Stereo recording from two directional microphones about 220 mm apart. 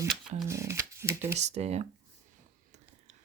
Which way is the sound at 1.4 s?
30° right (ahead or behind).